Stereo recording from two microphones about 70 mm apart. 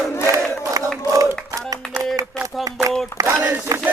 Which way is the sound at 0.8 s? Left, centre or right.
Right.